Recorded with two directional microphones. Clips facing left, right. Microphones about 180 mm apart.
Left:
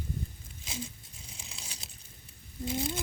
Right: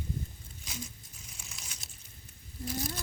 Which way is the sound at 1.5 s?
30° left (ahead or behind).